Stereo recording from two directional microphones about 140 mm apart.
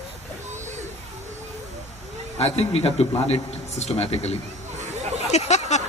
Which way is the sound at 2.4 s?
45° left (ahead or behind).